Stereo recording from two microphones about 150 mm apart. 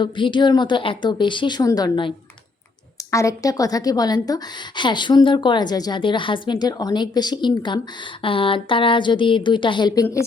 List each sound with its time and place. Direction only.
0.0 s a woman's voice: 30° left (ahead or behind)